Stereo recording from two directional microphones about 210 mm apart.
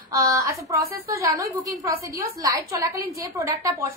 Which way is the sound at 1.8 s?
15° right (ahead or behind).